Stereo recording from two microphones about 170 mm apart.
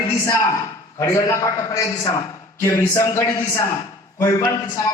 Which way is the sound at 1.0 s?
15° left (ahead or behind).